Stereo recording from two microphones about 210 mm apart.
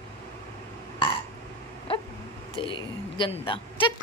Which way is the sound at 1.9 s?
25° left (ahead or behind).